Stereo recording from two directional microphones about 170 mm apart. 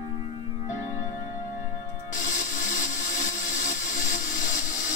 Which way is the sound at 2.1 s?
45° left (ahead or behind).